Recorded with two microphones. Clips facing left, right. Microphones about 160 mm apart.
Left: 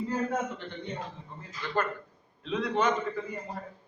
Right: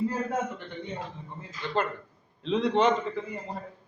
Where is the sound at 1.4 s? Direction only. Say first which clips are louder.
Right 2 dB; 25° right (ahead or behind).